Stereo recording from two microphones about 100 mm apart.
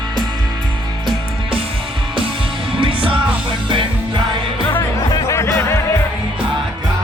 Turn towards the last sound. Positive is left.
turn(degrees=30)  # may be behind; listen again after turning